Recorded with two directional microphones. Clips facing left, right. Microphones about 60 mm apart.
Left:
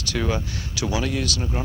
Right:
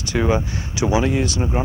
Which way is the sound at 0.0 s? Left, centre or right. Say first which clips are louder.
Right 6 dB; right.